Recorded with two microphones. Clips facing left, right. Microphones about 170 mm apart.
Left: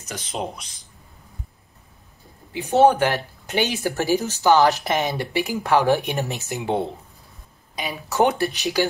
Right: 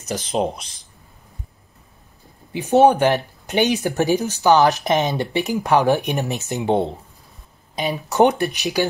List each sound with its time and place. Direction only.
0.1 s speech: 35° right (ahead or behind)
2.7 s speech: 15° right (ahead or behind)